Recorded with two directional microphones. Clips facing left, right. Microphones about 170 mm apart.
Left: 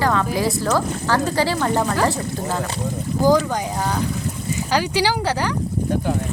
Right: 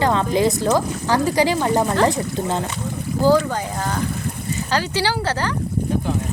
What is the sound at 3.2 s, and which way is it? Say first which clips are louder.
Speech: even; 15° left (ahead or behind).